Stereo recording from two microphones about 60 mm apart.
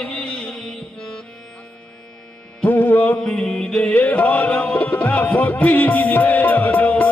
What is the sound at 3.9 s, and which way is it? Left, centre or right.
Music, left.